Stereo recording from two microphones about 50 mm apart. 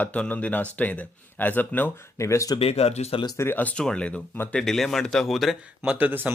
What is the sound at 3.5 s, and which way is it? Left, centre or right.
Speech, left.